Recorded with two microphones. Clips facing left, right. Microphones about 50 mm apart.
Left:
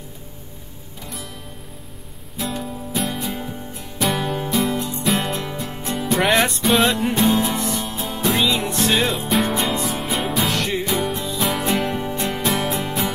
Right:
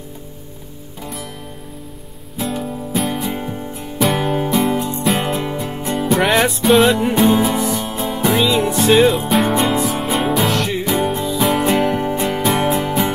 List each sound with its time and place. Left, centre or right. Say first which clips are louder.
2.3 s music: right 4 dB; centre
3.3 s music: right 5 dB; right
4.2 s music: right 5 dB; centre
4.6 s music: right 5 dB; centre
5.0 s music: right 2 dB; centre
5.4 s music: right 5 dB; centre
6.0 s music: right 3 dB; centre
11.8 s music: right 6 dB; right
12.8 s music: right 5 dB; centre